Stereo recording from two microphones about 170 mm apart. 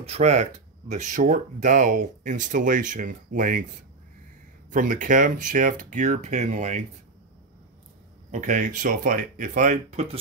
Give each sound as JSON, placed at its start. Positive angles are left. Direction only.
{"t": 0.0, "sound": "speech", "side_deg": -40}
{"t": 4.6, "sound": "speech", "side_deg": -50}
{"t": 8.3, "sound": "speech", "side_deg": -50}